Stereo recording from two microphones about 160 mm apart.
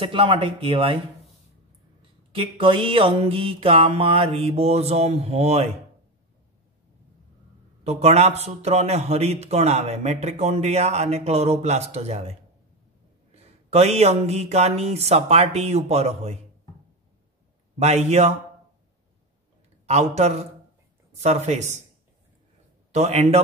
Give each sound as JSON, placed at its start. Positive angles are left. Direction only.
{"t": 0.0, "sound": "speech", "side_deg": -30}
{"t": 2.3, "sound": "speech", "side_deg": -35}
{"t": 7.8, "sound": "speech", "side_deg": -45}
{"t": 13.3, "sound": "speech", "side_deg": -40}
{"t": 17.7, "sound": "a man's voice", "side_deg": -45}
{"t": 19.9, "sound": "a man's voice", "side_deg": -45}
{"t": 22.9, "sound": "speech", "side_deg": -40}